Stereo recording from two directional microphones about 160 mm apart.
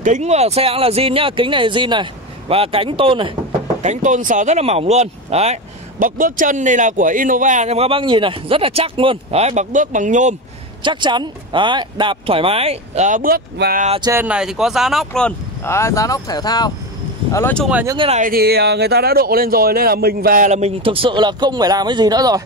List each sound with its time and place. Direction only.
0.0 s speech: 50° right (ahead or behind); by 3.3 s 35° right (ahead or behind)
3.8 s speech: 50° right (ahead or behind)
10.8 s speech: 30° right (ahead or behind); by 13.8 s 70° right (ahead or behind)
14.2 s speech: 5° right (ahead or behind)
15.7 s speech: 20° left (ahead or behind)
17.3 s speech: 15° left (ahead or behind)
17.9 s speech: 35° right (ahead or behind)
18.2 s speech: 70° right (ahead or behind)
20.4 s speech: 45° right (ahead or behind); by 22.4 s 25° right (ahead or behind)